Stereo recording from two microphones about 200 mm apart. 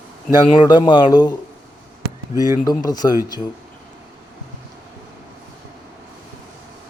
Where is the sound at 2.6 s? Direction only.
20° left (ahead or behind).